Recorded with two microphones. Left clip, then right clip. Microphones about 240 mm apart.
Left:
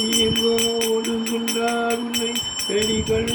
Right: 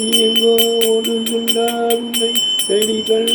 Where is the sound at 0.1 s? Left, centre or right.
Centre.